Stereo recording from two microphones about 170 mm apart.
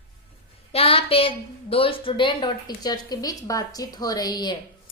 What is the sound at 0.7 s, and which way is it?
A woman's voice, 35° left (ahead or behind).